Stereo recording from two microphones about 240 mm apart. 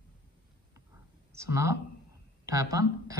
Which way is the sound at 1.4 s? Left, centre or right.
Centre.